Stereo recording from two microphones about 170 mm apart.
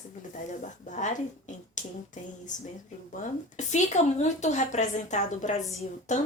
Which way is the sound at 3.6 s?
45° left (ahead or behind).